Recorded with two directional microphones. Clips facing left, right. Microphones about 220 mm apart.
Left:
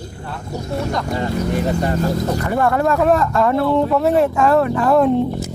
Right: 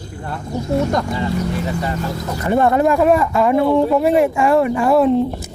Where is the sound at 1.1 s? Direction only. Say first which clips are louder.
Left 1 dB; 45° left (ahead or behind).